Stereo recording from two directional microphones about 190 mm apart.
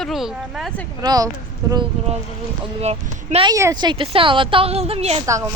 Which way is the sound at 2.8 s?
35° right (ahead or behind).